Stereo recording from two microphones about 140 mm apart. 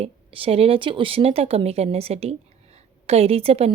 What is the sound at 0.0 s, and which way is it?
A woman's voice, 40° right (ahead or behind).